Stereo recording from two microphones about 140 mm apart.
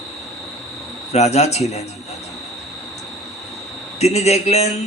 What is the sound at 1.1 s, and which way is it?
Speech, 50° left (ahead or behind).